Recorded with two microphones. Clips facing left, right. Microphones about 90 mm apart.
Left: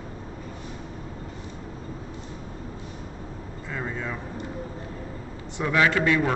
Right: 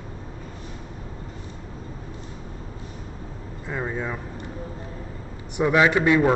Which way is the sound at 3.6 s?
20° right (ahead or behind).